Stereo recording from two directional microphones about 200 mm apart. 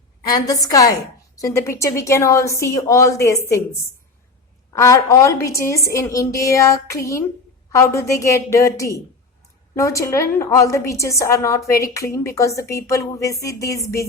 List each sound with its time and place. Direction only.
0.3 s a woman's voice: 20° left (ahead or behind)
4.7 s a woman's voice: 15° left (ahead or behind)